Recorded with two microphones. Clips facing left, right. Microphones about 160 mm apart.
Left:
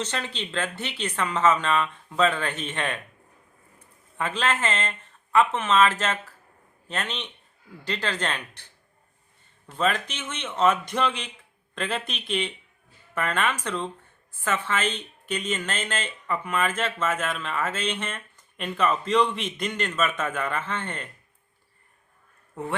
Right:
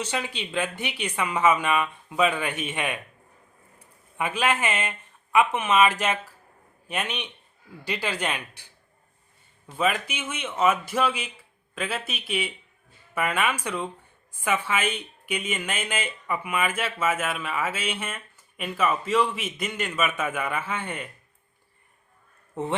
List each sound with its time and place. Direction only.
0.0 s a woman's voice: 10° right (ahead or behind)
22.6 s speech: 20° right (ahead or behind)